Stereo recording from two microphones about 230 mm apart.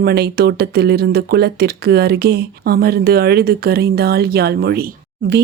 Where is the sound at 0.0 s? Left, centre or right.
Right.